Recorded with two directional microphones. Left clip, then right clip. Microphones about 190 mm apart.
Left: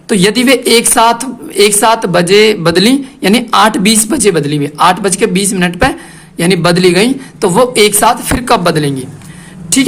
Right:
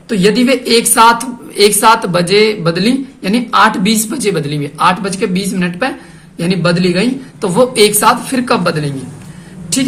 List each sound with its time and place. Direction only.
0.1 s a woman's voice: 50° left (ahead or behind)